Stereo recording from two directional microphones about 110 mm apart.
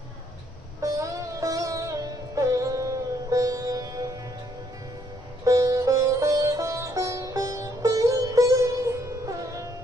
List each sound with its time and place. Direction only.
0.8 s sitar: 30° right (ahead or behind)
2.3 s music: 30° right (ahead or behind)
5.5 s sitar: 30° right (ahead or behind)